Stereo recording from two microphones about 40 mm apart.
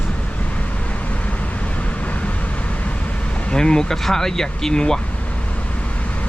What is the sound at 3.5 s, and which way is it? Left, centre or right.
Speech, centre.